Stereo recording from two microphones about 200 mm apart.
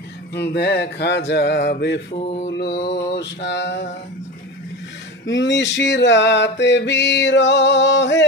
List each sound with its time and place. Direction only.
0.3 s mantra: 55° left (ahead or behind)
2.1 s mantra: 30° left (ahead or behind)
2.5 s mantra: 55° left (ahead or behind)
5.2 s mantra: 65° left (ahead or behind)